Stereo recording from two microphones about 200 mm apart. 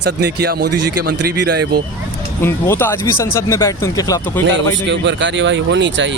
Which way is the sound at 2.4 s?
10° left (ahead or behind).